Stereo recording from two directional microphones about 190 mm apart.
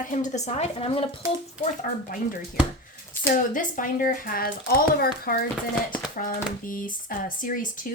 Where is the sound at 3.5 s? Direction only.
45° left (ahead or behind).